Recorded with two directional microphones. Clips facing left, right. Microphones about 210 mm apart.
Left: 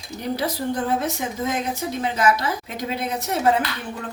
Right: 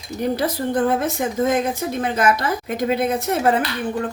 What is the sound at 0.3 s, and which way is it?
Speech, 55° right (ahead or behind).